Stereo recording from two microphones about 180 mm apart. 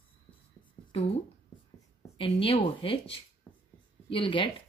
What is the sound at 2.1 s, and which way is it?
Speech, 30° left (ahead or behind).